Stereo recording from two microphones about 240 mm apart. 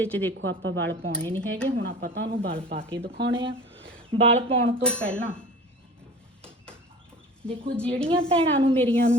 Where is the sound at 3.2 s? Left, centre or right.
Right.